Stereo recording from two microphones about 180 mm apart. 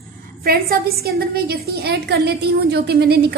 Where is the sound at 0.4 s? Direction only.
55° right (ahead or behind).